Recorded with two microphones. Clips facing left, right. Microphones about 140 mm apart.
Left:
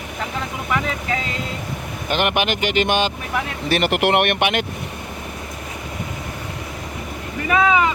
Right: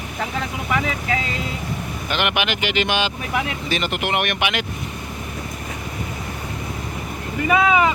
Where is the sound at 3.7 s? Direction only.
70° left (ahead or behind); by 4.6 s 55° left (ahead or behind).